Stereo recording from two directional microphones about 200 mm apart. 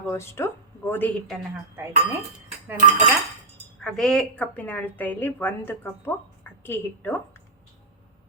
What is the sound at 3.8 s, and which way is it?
A woman's voice, centre (ahead or behind).